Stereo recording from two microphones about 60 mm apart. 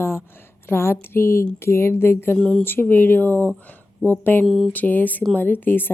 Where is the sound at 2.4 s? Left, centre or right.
Centre.